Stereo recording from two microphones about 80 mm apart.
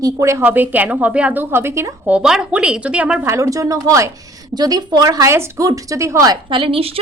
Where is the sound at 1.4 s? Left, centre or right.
Right.